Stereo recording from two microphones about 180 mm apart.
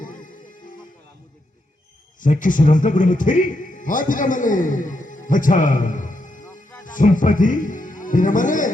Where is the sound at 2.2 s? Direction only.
45° left (ahead or behind).